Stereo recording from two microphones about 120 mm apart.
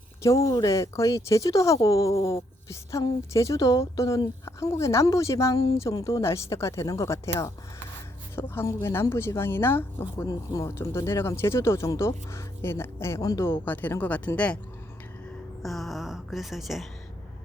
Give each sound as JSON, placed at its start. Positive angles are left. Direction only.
{"t": 0.2, "sound": "speech", "side_deg": 25}
{"t": 3.3, "sound": "speech", "side_deg": 25}
{"t": 13.5, "sound": "speech", "side_deg": 15}
{"t": 15.6, "sound": "a sound", "side_deg": 0}